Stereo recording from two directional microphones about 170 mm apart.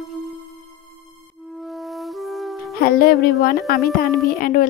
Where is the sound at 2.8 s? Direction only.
60° left (ahead or behind).